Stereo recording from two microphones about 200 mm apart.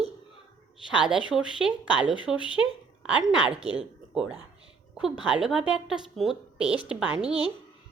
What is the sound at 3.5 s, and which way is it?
Speech, 30° right (ahead or behind).